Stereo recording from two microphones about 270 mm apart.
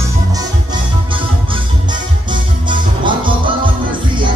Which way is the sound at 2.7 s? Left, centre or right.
Centre.